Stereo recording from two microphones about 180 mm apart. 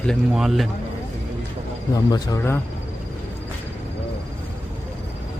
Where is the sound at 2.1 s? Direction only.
15° left (ahead or behind).